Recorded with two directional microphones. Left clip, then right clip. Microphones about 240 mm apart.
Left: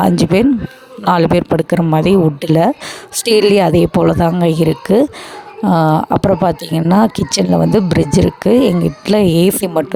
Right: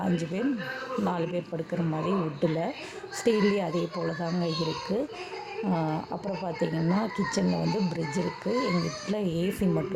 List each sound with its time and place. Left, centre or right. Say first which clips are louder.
0.0 s speech: left 18 dB; left